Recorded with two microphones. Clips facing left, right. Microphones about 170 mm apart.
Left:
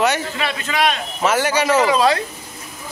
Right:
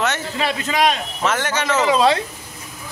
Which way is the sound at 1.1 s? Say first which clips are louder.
Left 4 dB; 10° left (ahead or behind).